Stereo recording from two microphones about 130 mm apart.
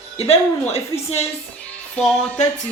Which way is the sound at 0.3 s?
50° left (ahead or behind).